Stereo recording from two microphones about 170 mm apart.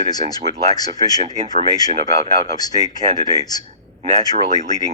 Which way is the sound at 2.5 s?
20° left (ahead or behind).